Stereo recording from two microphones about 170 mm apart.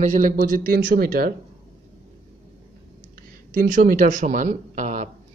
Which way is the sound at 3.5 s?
55° right (ahead or behind).